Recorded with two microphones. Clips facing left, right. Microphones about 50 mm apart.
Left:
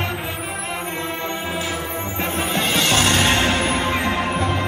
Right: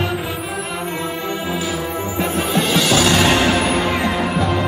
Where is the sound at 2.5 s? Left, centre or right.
Left.